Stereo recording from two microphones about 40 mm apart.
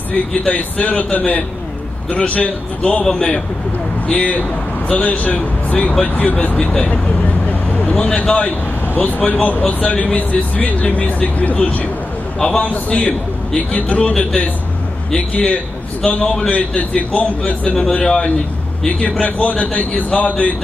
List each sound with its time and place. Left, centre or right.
0.5 s a man's voice: left
4.1 s speech: left
7.4 s a sound: left
8.0 s a man's voice: left
8.9 s speech: left
15.1 s speech: left
17.7 s speech: centre
18.9 s speech: left